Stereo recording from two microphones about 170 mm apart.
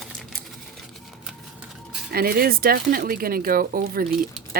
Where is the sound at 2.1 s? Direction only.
60° right (ahead or behind).